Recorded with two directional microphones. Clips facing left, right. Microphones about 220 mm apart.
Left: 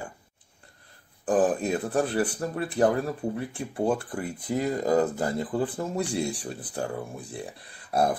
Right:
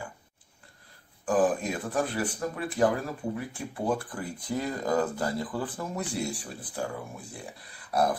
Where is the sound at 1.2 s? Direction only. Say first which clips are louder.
Left 2 dB; 35° left (ahead or behind).